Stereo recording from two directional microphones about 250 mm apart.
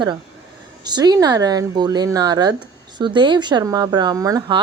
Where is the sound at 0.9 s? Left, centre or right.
Centre.